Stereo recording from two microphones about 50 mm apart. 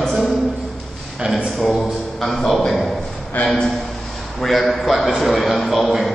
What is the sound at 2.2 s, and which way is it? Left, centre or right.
Speech, centre.